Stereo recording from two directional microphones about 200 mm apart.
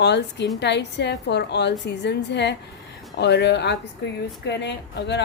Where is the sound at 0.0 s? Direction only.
60° left (ahead or behind).